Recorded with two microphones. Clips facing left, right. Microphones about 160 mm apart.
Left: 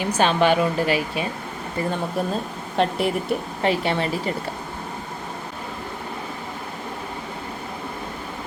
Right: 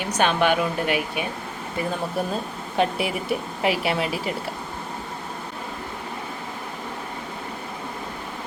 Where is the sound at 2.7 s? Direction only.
5° right (ahead or behind).